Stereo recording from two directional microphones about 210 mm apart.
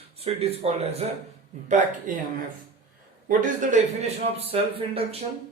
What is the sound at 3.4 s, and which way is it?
A man's voice, 35° right (ahead or behind).